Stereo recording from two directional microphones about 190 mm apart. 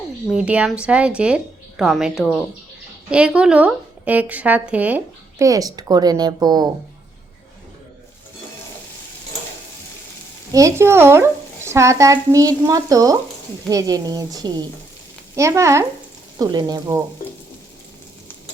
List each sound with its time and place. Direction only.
0.3 s a woman's voice: 5° right (ahead or behind); by 6.7 s 20° right (ahead or behind)
10.5 s a woman's voice: 15° right (ahead or behind)